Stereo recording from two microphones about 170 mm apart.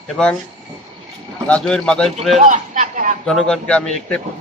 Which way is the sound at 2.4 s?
50° right (ahead or behind).